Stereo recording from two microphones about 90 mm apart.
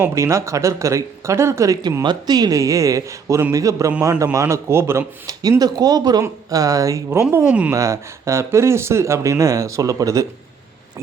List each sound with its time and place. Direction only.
0.0 s speech: 35° right (ahead or behind)
2.0 s speech: 50° right (ahead or behind); by 5.0 s 30° right (ahead or behind)
5.2 s speech: 45° right (ahead or behind)
7.3 s speech: 20° right (ahead or behind)
7.7 s speech: 35° right (ahead or behind)